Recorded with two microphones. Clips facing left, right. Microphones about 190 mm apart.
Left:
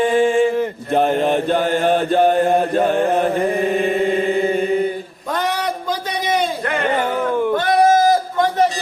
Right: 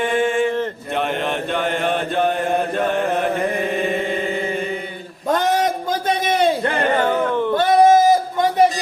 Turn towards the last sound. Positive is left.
turn(degrees=10)  # may be behind; listen again after turning